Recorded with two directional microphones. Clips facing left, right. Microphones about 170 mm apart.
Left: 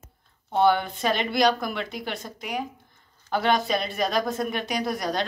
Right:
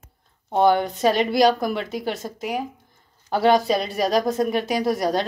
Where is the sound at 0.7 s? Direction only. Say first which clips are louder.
Right 5 dB; 40° right (ahead or behind).